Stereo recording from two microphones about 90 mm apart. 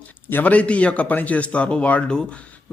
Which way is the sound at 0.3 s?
20° left (ahead or behind).